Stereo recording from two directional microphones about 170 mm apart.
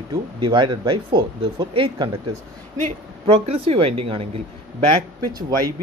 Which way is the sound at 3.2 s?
30° right (ahead or behind).